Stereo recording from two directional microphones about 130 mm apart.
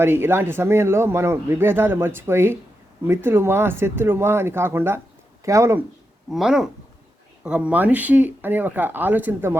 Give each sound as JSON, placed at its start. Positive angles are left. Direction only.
{"t": 0.0, "sound": "a man's voice", "side_deg": -15}
{"t": 6.3, "sound": "a man's voice", "side_deg": -5}